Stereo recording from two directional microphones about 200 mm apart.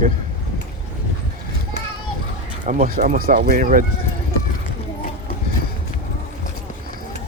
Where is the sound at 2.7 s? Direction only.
45° right (ahead or behind).